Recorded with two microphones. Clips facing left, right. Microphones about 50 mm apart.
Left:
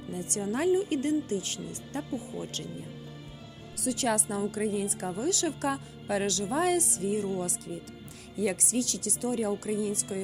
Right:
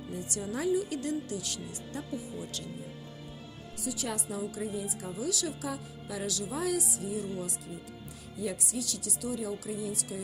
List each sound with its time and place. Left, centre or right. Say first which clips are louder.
0.1 s speech: left 4 dB; left
3.8 s a woman's voice: left 7 dB; left
5.1 s speech: left 3 dB; left
8.4 s a woman's voice: left 6 dB; left